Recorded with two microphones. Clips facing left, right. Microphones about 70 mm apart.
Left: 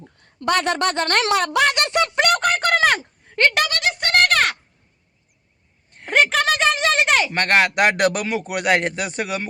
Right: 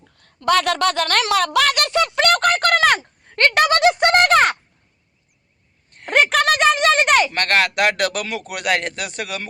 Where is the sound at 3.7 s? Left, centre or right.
Right.